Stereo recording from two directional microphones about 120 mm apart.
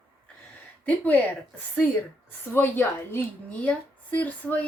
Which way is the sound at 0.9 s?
10° left (ahead or behind).